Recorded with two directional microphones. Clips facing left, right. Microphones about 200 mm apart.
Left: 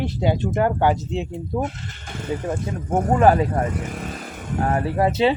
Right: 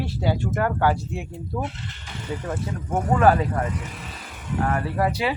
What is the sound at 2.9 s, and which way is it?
Speech, 45° left (ahead or behind).